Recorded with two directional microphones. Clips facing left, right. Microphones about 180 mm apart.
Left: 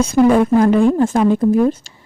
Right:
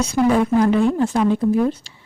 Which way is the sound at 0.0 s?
50° left (ahead or behind).